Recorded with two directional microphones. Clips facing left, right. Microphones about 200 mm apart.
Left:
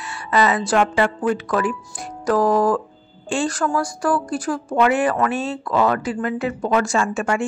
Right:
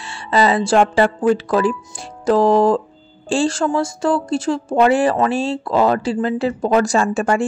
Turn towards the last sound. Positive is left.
turn(degrees=-35)  # may be behind; listen again after turning